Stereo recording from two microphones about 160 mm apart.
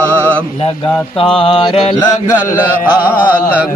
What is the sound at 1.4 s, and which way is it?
Mantra, 35° left (ahead or behind).